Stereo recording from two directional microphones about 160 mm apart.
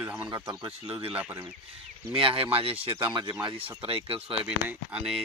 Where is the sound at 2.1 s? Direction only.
35° right (ahead or behind).